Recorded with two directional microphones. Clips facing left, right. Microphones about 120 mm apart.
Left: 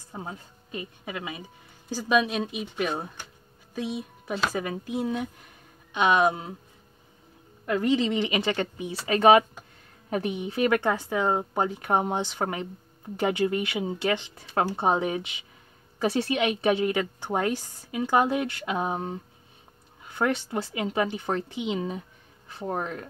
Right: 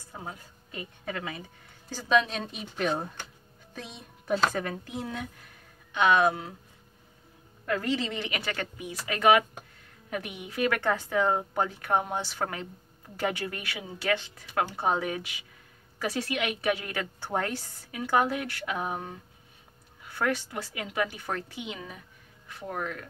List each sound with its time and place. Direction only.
0.1 s a woman's voice: 25° left (ahead or behind)
7.6 s a woman's voice: 20° left (ahead or behind)